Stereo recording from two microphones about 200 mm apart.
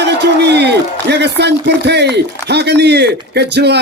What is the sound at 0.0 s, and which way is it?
A man's voice, 55° right (ahead or behind).